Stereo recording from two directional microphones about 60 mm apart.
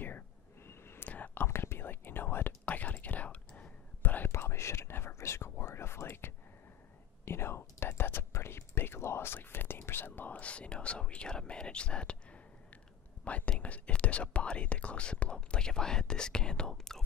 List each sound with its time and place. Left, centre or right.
0.7 s whispering: left
1.0 s whispering: left
4.3 s whispering: left; by 12.4 s centre
13.2 s speech: left; by 17.0 s centre